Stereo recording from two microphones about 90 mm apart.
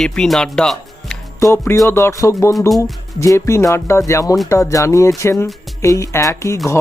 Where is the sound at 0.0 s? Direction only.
5° left (ahead or behind).